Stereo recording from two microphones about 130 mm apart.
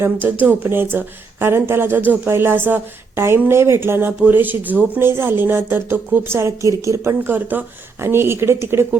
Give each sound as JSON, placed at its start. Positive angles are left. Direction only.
{"t": 0.0, "sound": "speech", "side_deg": -15}